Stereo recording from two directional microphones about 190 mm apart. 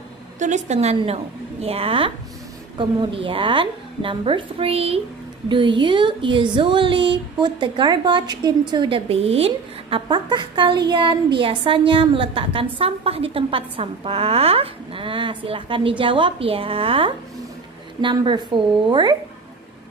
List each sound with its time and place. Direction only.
0.4 s a woman's voice: 40° right (ahead or behind)